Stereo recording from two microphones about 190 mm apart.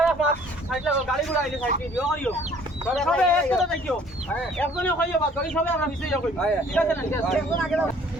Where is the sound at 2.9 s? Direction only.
5° left (ahead or behind).